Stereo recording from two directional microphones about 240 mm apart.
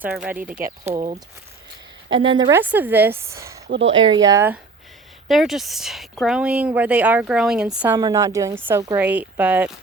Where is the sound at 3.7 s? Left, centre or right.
Right.